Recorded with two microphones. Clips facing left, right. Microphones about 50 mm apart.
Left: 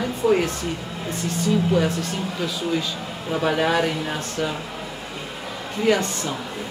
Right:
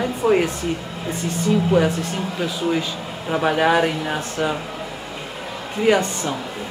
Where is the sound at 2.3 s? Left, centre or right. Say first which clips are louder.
Right 4 dB; centre.